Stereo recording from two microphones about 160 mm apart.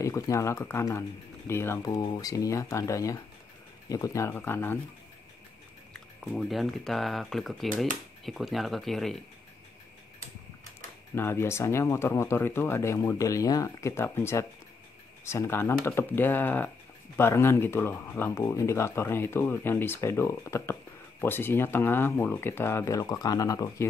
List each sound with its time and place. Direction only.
0.0 s speech: 20° left (ahead or behind)
1.9 s speech: 25° left (ahead or behind)
5.9 s speech: 5° left (ahead or behind)
11.1 s speech: 15° left (ahead or behind)